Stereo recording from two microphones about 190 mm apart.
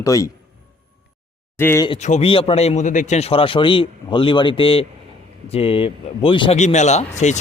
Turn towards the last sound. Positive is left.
turn(degrees=35)  # may be behind; listen again after turning